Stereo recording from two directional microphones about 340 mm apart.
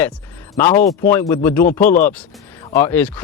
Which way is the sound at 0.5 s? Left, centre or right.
Centre.